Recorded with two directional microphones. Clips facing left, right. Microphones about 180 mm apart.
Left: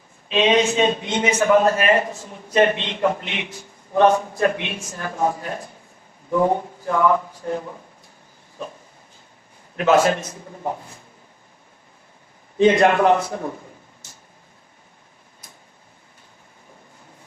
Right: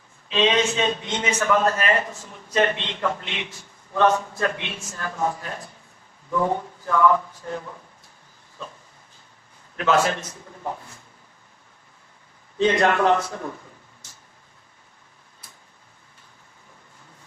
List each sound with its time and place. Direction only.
0.3 s a man's voice: 15° left (ahead or behind)
6.8 s a man's voice: 15° left (ahead or behind)
8.6 s a man's voice: 15° left (ahead or behind)
12.5 s a man's voice: 15° left (ahead or behind)